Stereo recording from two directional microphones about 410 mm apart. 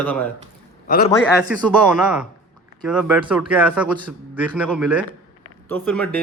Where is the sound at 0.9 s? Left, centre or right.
Left.